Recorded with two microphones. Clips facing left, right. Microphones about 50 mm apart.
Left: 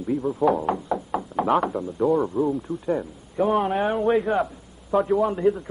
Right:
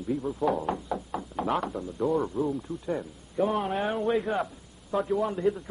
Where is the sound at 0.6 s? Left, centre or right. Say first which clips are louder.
Left 5 dB; centre.